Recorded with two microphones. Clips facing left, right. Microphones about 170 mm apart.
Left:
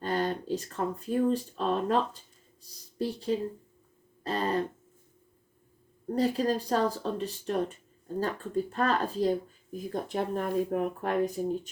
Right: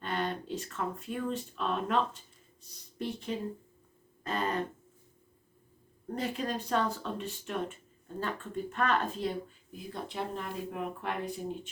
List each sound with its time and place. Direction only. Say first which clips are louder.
0.0 s speech: left 5 dB; 35° left (ahead or behind)
4.2 s throat clearing: left 3 dB; 35° left (ahead or behind)
6.1 s speech: left 7 dB; 35° left (ahead or behind)